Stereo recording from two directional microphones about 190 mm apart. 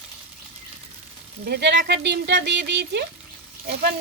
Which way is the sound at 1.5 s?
60° right (ahead or behind).